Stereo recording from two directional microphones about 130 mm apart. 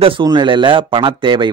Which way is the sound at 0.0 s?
35° right (ahead or behind).